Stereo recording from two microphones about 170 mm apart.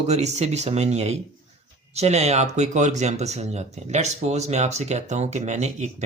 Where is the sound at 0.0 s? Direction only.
40° right (ahead or behind).